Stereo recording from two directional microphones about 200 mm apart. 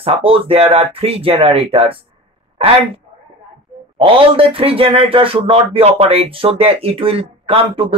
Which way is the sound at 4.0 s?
25° right (ahead or behind).